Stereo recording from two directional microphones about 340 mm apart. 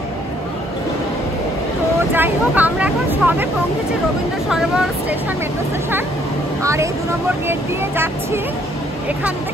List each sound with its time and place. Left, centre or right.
2.1 s speech: centre
4.5 s speech: centre
6.6 s speech: centre